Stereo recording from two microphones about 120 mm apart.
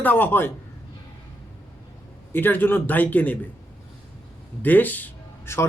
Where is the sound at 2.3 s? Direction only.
15° left (ahead or behind).